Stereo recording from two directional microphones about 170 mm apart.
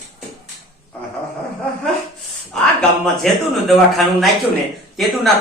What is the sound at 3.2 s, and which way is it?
Speech, 5° left (ahead or behind).